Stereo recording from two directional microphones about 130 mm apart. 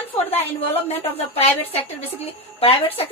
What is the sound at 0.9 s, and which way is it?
A woman's voice, 50° left (ahead or behind).